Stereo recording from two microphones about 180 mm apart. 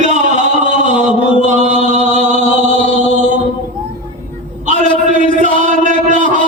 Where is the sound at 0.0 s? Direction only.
40° right (ahead or behind).